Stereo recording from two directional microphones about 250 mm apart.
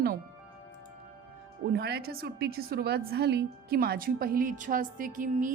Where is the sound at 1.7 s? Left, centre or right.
Right.